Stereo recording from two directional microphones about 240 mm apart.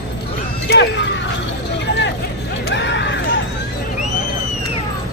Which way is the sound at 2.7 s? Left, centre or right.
Left.